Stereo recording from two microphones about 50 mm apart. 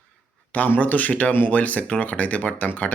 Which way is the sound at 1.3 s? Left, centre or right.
Left.